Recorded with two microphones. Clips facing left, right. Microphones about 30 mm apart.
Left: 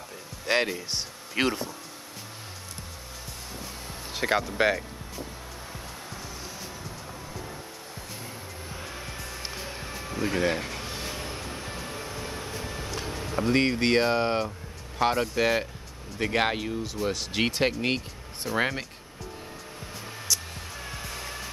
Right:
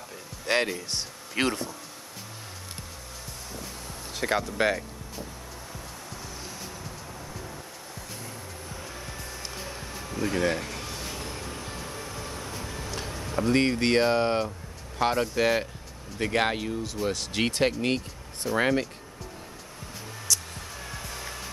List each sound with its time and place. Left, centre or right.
0.5 s speech: centre
3.6 s music: centre
8.6 s music: centre
10.9 s vehicle: centre
13.1 s speech: centre
20.3 s music: centre